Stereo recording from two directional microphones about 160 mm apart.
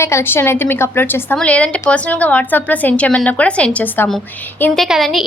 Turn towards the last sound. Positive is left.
turn(degrees=0)  # may be behind; listen again after turning